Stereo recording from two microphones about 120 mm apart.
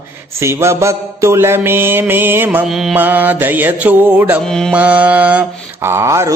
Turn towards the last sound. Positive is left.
turn(degrees=-25)  # may be behind; listen again after turning